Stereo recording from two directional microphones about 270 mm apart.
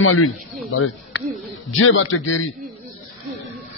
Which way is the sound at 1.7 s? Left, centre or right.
Left.